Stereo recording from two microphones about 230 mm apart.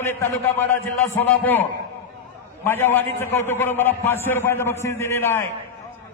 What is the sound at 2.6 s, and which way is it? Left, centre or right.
A man's voice, centre.